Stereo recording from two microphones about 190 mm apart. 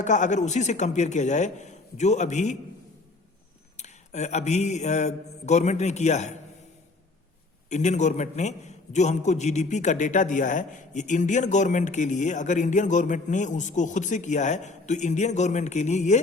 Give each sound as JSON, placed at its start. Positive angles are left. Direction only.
{"t": 0.0, "sound": "a man's voice", "side_deg": 40}
{"t": 3.8, "sound": "a man's voice", "side_deg": 35}
{"t": 7.7, "sound": "a man's voice", "side_deg": 40}